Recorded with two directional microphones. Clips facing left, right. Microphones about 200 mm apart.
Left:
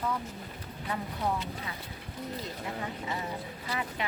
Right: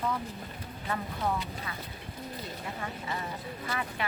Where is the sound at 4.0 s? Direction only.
20° left (ahead or behind).